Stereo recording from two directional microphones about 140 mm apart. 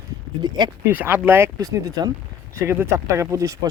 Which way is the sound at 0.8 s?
15° right (ahead or behind).